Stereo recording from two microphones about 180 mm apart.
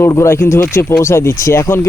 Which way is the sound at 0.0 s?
15° left (ahead or behind).